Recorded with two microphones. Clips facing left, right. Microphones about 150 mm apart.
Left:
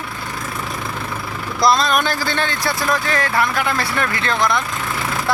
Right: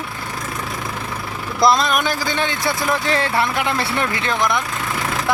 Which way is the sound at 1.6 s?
15° right (ahead or behind).